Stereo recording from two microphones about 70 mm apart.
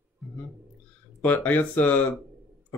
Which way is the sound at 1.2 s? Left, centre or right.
Left.